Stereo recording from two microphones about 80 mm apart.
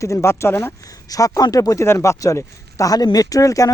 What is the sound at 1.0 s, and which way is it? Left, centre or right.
Speech, left.